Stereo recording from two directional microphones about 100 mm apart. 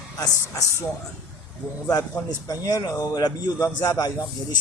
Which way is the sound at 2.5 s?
40° left (ahead or behind).